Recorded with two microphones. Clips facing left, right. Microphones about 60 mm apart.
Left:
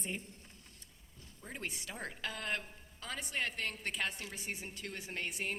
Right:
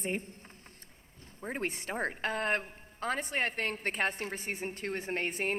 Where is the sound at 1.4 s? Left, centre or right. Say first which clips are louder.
Right 8 dB; right.